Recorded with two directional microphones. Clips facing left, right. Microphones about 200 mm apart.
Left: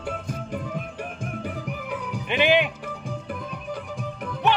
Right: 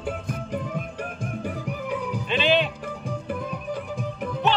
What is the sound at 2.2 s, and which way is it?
Music, 15° left (ahead or behind).